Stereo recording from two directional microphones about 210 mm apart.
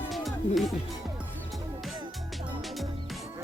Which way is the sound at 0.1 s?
Centre (ahead or behind).